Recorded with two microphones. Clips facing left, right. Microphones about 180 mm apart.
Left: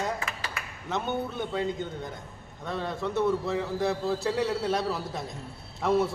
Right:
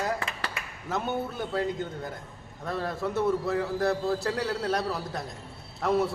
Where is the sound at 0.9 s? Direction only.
5° right (ahead or behind).